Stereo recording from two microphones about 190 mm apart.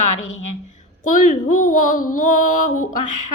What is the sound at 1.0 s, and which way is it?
A woman's voice, 45° left (ahead or behind).